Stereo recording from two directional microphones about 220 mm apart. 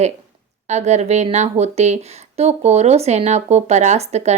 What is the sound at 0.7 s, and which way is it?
A woman's voice, 30° right (ahead or behind).